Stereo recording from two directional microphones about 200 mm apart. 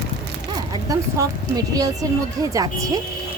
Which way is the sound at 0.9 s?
15° right (ahead or behind).